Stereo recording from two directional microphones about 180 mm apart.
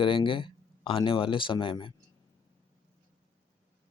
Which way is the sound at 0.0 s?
30° left (ahead or behind).